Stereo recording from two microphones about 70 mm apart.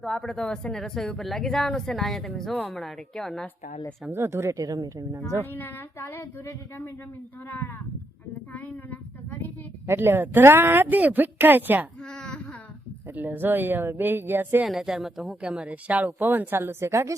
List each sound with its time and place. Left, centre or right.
0.0 s speech: centre
4.1 s speech: right
4.5 s a woman's voice: right
5.4 s speech: left
8.5 s speech: left
9.8 s speech: right
12.1 s a sound: centre
13.1 s speech: right
14.7 s speech: centre; by 17.2 s right